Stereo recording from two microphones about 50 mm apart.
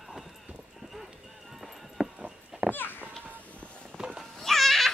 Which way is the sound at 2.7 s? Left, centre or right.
Left.